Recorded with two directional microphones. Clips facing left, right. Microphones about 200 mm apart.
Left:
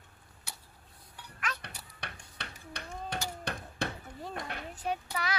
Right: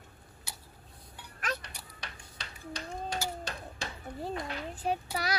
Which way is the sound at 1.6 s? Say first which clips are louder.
Left 1 dB; 60° left (ahead or behind).